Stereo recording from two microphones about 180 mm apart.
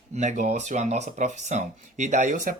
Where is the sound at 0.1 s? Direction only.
40° right (ahead or behind).